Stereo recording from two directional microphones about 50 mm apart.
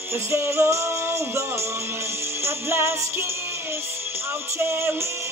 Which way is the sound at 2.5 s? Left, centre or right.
Right.